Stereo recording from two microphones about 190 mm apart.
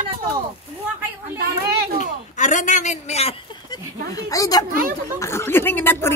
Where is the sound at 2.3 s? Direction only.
40° left (ahead or behind).